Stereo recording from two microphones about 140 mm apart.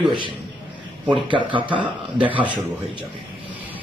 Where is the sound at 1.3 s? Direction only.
35° right (ahead or behind).